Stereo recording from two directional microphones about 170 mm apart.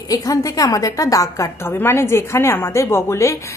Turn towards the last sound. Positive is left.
turn(degrees=15)  # may be behind; listen again after turning